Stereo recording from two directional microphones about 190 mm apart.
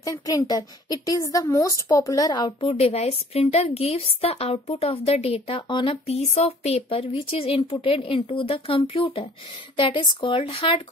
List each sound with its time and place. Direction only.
0.0 s a woman's voice: 20° left (ahead or behind)
2.7 s a woman's voice: 35° left (ahead or behind)